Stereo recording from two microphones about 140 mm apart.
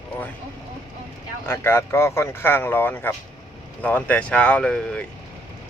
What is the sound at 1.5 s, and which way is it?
Speech, 15° left (ahead or behind).